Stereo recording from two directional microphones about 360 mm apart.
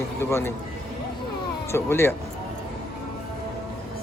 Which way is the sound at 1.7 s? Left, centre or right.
Centre.